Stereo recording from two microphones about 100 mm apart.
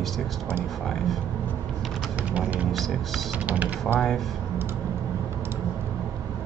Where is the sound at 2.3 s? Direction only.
15° right (ahead or behind).